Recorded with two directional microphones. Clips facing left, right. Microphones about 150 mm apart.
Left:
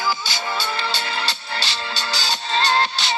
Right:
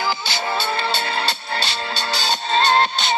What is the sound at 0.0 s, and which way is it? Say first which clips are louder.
Music: right 1 dB; 60° right (ahead or behind).